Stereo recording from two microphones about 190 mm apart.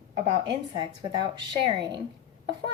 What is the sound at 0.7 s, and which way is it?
A woman's voice, 25° right (ahead or behind).